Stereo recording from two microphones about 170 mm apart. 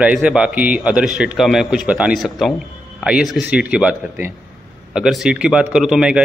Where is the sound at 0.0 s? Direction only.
5° right (ahead or behind).